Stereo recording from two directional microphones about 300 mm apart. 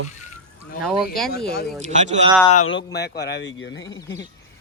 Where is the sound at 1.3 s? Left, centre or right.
Left.